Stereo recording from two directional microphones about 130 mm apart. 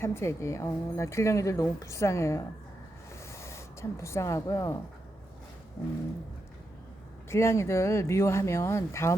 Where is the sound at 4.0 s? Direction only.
20° left (ahead or behind).